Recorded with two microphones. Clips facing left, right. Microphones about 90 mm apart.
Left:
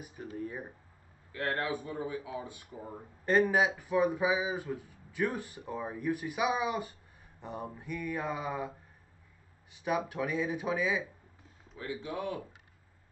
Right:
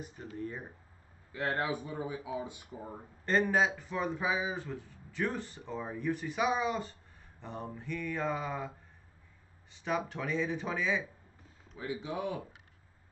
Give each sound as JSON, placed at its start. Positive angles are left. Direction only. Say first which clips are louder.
{"t": 0.0, "sound": "speech", "louder": "left 1 dB", "side_deg": 10}
{"t": 1.3, "sound": "speech", "louder": "even", "side_deg": -20}
{"t": 3.3, "sound": "speech", "louder": "left 2 dB", "side_deg": 10}
{"t": 11.8, "sound": "speech", "louder": "right 1 dB", "side_deg": -20}